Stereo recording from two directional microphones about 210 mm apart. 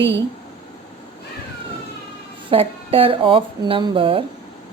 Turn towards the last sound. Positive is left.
turn(degrees=-25)  # may be behind; listen again after turning